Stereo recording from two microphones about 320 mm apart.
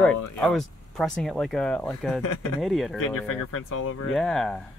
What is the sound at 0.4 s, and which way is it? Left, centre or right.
Speech, centre.